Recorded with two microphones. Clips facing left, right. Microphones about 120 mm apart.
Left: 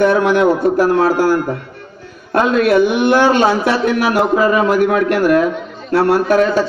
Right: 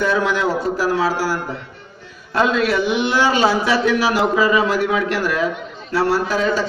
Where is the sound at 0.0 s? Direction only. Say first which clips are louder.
Left 7 dB; 55° left (ahead or behind).